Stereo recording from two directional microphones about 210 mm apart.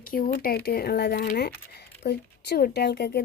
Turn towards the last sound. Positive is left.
turn(degrees=50)  # may be behind; listen again after turning